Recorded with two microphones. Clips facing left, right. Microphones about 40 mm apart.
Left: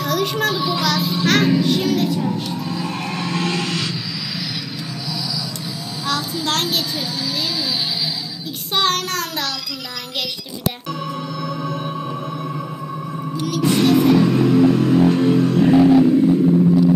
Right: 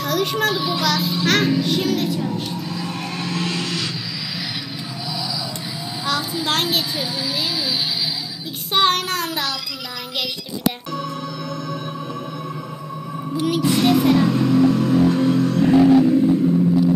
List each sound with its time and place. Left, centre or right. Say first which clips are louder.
0.0 s a child's voice: even; centre
2.9 s a sound: left 2 dB; centre
6.0 s a child's voice: even; centre
8.7 s child singing: right 1 dB; centre
13.4 s music: right 2 dB; centre
13.9 s music: left 2 dB; centre